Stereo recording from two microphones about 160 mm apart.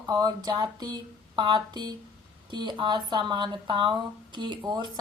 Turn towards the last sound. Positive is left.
turn(degrees=-30)  # may be behind; listen again after turning